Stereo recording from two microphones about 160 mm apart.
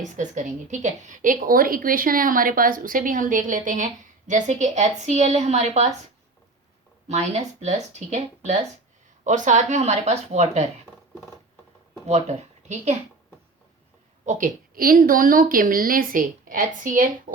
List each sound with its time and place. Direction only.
0.2 s a woman's voice: 50° right (ahead or behind)
7.1 s a woman's voice: 45° right (ahead or behind)
12.0 s speech: 45° right (ahead or behind)
14.3 s a woman's voice: 55° right (ahead or behind)